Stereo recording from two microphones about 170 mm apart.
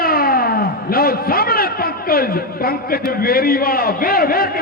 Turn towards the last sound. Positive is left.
turn(degrees=60)  # may be behind; listen again after turning